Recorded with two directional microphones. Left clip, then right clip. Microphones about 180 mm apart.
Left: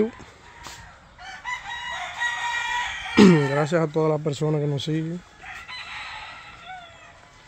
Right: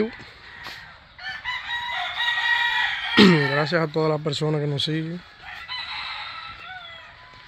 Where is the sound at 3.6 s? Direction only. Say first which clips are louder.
Even; 10° left (ahead or behind).